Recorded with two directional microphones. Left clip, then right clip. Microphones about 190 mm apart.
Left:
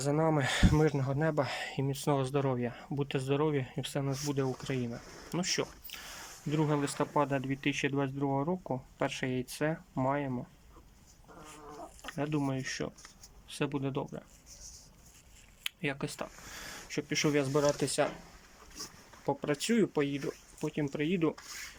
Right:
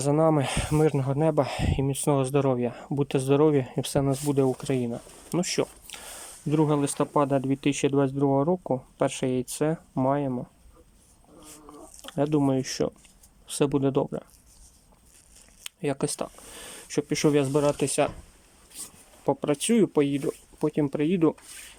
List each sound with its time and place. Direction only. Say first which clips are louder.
0.0 s speech: right 7 dB; 15° right (ahead or behind)
12.0 s speech: right 10 dB; 25° right (ahead or behind)
19.2 s speech: right 7 dB; 15° right (ahead or behind)